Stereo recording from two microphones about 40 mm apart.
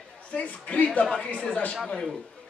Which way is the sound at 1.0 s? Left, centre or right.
Left.